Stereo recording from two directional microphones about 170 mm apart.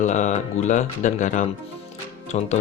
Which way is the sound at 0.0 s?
45° left (ahead or behind).